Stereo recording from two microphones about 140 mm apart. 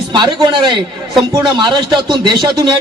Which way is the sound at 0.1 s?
35° right (ahead or behind).